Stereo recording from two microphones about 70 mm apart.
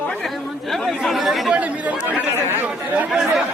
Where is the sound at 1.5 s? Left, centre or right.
Centre.